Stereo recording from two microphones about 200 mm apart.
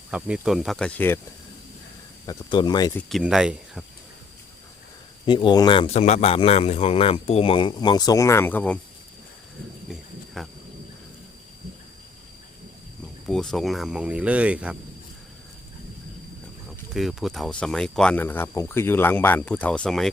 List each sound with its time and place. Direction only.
0.1 s speech: 5° right (ahead or behind)
2.2 s speech: 20° left (ahead or behind)
2.9 s speech: centre (ahead or behind)
5.2 s speech: 25° left (ahead or behind); by 8.8 s 10° left (ahead or behind)
9.9 s cricket: centre (ahead or behind)
13.2 s speech: 5° left (ahead or behind)
16.9 s speech: centre (ahead or behind)